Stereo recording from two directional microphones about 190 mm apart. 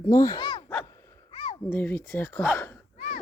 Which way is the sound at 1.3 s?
30° left (ahead or behind).